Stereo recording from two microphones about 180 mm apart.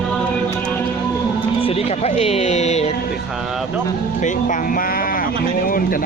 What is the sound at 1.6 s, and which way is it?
Speech, 35° left (ahead or behind).